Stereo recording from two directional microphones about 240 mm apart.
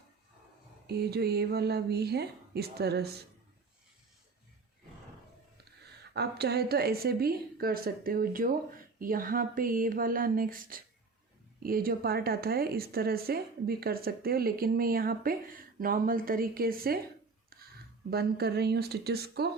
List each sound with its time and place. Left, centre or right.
0.9 s speech: right
6.1 s speech: right
17.5 s a sound: right
18.1 s speech: right